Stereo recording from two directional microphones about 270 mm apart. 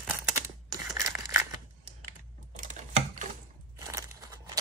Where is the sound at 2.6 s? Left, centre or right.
Right.